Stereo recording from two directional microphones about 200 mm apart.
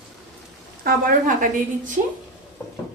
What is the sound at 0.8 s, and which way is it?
Speech, 45° right (ahead or behind).